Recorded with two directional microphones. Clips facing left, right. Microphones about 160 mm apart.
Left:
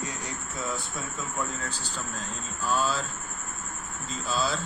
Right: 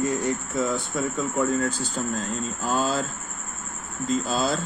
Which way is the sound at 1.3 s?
55° right (ahead or behind).